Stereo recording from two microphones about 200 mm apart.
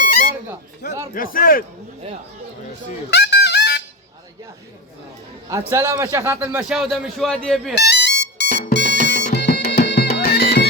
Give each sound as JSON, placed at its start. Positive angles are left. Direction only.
{"t": 1.1, "sound": "a man's voice", "side_deg": 45}
{"t": 3.1, "sound": "music", "side_deg": 55}
{"t": 5.5, "sound": "a man's voice", "side_deg": -15}
{"t": 7.8, "sound": "music", "side_deg": 55}